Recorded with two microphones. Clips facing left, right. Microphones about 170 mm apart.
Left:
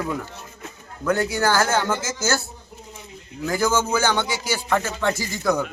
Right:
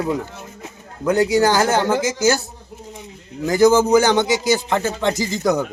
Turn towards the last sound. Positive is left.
turn(degrees=-20)  # may be behind; listen again after turning